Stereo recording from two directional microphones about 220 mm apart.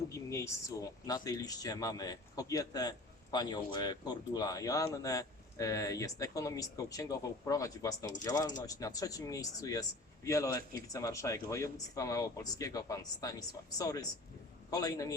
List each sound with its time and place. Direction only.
0.1 s a man's voice: 15° left (ahead or behind)